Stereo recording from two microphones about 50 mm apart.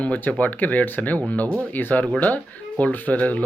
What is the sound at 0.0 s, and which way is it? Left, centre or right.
Speech, left.